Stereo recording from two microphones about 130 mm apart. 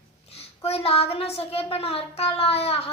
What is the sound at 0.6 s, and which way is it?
Child singing, 50° left (ahead or behind).